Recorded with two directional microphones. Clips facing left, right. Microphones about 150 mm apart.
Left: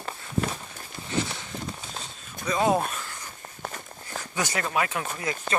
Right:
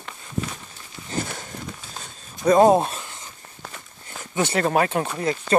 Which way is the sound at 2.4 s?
50° right (ahead or behind).